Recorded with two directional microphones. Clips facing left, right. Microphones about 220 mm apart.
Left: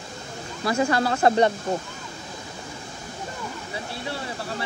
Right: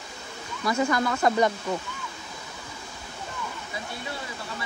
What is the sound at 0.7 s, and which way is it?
Speech, 30° left (ahead or behind).